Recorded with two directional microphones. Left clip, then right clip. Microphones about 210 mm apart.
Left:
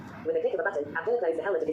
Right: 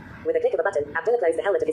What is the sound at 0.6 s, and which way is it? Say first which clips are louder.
Speech: right 6 dB; 25° right (ahead or behind).